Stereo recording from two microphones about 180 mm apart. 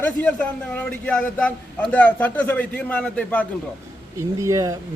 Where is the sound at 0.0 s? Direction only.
10° left (ahead or behind).